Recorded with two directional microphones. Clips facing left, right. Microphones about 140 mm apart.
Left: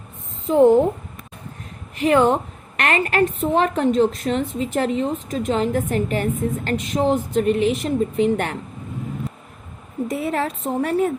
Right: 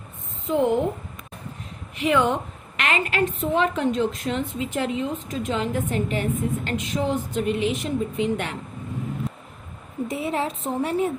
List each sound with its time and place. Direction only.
0.4 s a woman's voice: 35° left (ahead or behind)
2.0 s a woman's voice: 40° left (ahead or behind)
10.1 s a woman's voice: 50° left (ahead or behind)